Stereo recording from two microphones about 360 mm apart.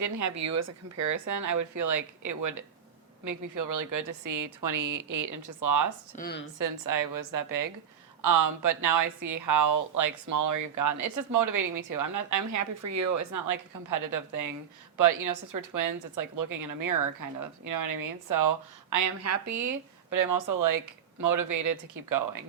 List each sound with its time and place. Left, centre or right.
0.0 s a woman's voice: right
6.1 s speech: left
6.6 s a woman's voice: right